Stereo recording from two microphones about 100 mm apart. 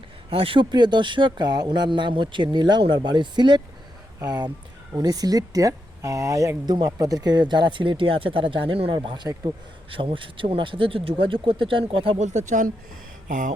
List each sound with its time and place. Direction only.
0.3 s speech: 65° right (ahead or behind)
0.7 s speech: 45° right (ahead or behind); by 9.0 s 65° right (ahead or behind)
9.0 s speech: 50° right (ahead or behind)
9.9 s speech: 60° right (ahead or behind)